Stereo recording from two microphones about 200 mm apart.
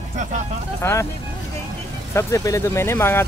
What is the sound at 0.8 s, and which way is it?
Speech, 10° left (ahead or behind).